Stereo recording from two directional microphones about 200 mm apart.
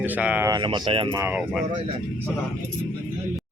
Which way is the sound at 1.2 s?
10° right (ahead or behind).